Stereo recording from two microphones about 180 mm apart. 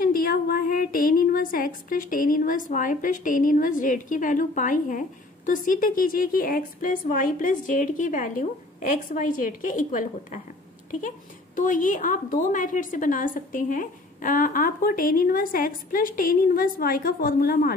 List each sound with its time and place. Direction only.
0.0 s a woman's voice: 55° left (ahead or behind)